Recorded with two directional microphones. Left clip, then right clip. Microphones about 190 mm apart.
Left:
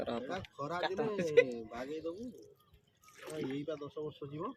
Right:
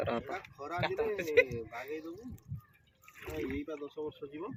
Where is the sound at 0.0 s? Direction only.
25° right (ahead or behind).